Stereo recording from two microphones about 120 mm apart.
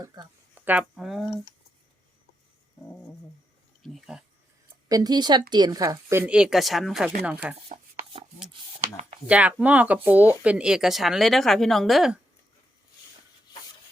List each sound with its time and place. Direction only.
0.0 s speech: 30° right (ahead or behind)
0.5 s speech: 15° right (ahead or behind)
3.8 s speech: centre (ahead or behind)
4.9 s speech: 35° right (ahead or behind)
6.2 s speech: 5° right (ahead or behind)
7.7 s chopping: 90° right
9.2 s speech: 10° right (ahead or behind)
13.5 s rub: 35° left (ahead or behind)